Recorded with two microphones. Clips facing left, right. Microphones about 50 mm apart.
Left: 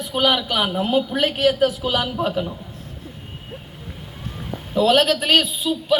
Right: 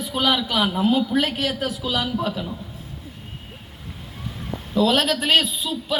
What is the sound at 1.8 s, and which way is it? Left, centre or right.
Speech, left.